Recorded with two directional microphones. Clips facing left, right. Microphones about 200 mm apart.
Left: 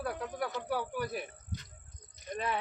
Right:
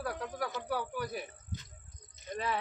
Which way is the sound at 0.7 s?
Centre (ahead or behind).